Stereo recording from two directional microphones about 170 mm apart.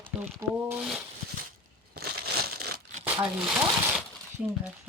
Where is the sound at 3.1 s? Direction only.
Centre (ahead or behind).